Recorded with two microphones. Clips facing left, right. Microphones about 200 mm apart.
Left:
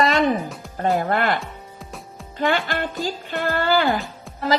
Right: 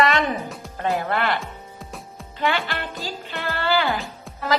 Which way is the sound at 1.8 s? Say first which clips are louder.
Even; centre (ahead or behind).